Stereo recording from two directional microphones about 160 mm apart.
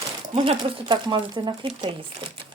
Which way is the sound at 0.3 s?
25° right (ahead or behind).